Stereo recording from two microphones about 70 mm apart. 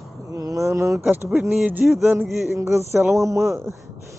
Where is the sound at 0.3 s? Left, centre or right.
Right.